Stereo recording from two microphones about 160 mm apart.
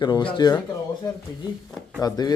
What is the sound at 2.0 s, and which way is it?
Speech, 25° left (ahead or behind).